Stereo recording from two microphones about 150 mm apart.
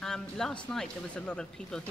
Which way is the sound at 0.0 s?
5° left (ahead or behind).